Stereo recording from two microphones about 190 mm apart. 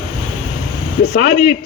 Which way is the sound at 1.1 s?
55° left (ahead or behind).